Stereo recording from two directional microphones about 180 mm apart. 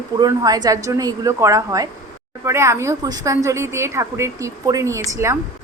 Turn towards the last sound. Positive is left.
turn(degrees=-15)  # may be behind; listen again after turning